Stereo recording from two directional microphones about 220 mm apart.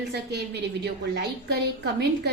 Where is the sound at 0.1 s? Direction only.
50° right (ahead or behind).